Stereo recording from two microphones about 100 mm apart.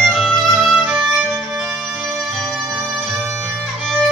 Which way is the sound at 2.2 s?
Centre (ahead or behind).